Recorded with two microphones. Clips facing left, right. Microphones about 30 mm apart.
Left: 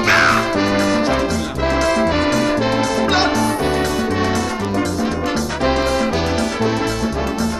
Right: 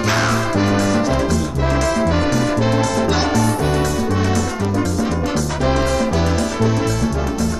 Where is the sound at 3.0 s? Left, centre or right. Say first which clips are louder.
Left 2 dB; left.